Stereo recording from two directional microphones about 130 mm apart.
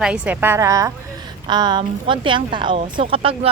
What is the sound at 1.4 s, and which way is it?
A woman's voice, 35° right (ahead or behind).